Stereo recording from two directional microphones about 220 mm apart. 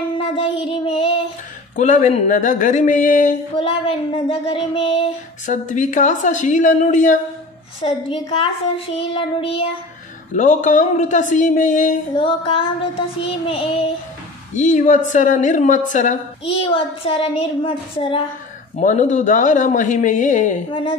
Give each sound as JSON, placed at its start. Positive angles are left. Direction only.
{"t": 0.4, "sound": "a sound", "side_deg": 25}
{"t": 1.8, "sound": "speech", "side_deg": 35}
{"t": 8.1, "sound": "child singing", "side_deg": 25}
{"t": 10.3, "sound": "speech", "side_deg": 35}
{"t": 12.2, "sound": "child singing", "side_deg": 25}
{"t": 14.5, "sound": "speech", "side_deg": 35}